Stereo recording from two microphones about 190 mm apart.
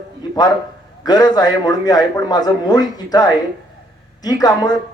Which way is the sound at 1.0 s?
20° left (ahead or behind).